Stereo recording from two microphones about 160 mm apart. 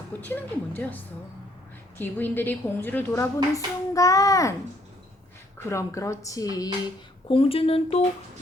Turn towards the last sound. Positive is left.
turn(degrees=35)  # may be behind; listen again after turning